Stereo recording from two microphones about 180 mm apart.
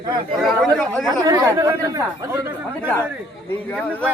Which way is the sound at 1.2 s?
15° right (ahead or behind).